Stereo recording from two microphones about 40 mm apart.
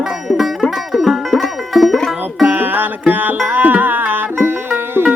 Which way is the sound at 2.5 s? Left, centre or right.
Right.